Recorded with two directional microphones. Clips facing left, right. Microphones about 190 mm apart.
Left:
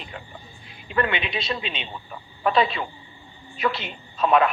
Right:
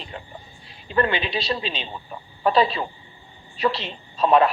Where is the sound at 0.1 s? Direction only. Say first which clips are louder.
Right 2 dB; 35° right (ahead or behind).